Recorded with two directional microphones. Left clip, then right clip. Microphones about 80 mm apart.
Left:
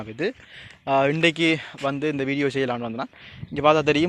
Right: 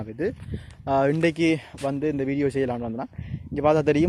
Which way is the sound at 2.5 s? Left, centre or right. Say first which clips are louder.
Left 1 dB; right.